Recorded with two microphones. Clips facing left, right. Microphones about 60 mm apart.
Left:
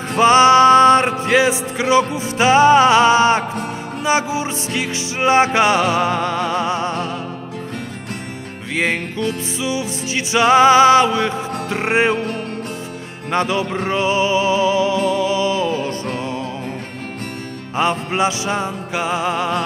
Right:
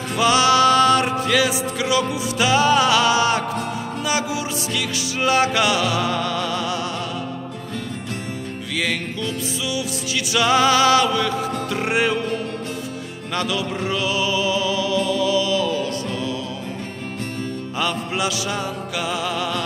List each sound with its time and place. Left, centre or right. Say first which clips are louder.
0.1 s music: left 6 dB; left
8.7 s music: left 5 dB; left
13.3 s music: left 5 dB; left
17.7 s music: left 6 dB; left